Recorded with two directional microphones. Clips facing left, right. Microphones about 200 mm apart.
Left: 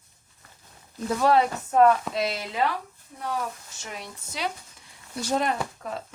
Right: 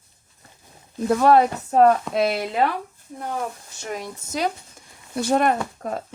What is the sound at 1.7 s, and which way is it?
Speech, 40° right (ahead or behind).